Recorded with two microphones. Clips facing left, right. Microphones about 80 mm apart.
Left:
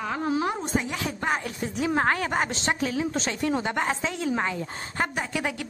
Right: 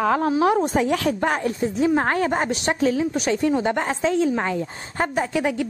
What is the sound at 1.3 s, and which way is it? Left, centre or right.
Speech, right.